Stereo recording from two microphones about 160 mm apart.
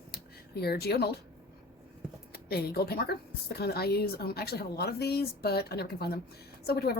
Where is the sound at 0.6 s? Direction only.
80° left.